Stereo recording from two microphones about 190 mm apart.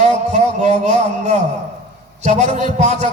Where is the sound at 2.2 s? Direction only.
35° right (ahead or behind).